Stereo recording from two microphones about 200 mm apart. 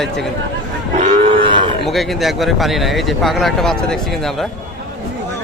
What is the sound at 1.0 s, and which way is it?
Cattle, 35° right (ahead or behind).